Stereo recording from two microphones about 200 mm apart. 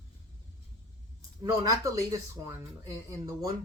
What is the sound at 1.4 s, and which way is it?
Speech, 20° right (ahead or behind).